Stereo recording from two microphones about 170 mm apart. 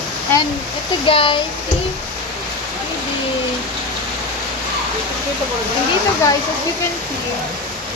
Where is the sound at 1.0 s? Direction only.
30° left (ahead or behind).